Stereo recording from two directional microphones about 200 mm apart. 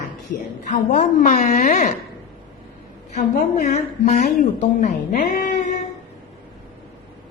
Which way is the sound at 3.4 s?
40° left (ahead or behind).